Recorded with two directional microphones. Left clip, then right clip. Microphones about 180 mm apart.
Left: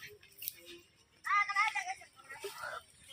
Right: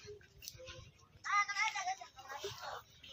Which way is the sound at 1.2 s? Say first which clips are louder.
Left 3 dB; 30° right (ahead or behind).